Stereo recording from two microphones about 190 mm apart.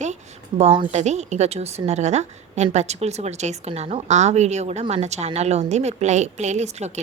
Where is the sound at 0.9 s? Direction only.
35° right (ahead or behind).